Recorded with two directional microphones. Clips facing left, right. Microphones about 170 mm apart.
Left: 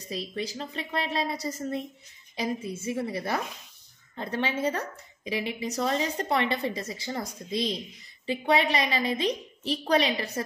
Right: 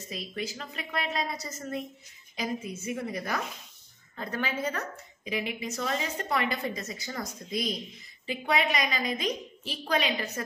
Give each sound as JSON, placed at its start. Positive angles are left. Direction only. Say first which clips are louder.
{"t": 0.1, "sound": "a woman's voice", "louder": "left 3 dB", "side_deg": 35}